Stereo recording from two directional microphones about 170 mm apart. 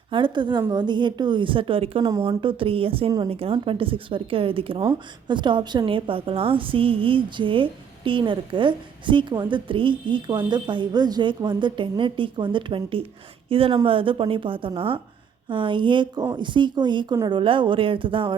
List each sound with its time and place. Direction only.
0.1 s a woman's voice: 25° right (ahead or behind)